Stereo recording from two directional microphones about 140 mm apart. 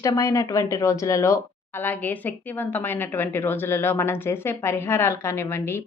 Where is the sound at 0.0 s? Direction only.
20° left (ahead or behind).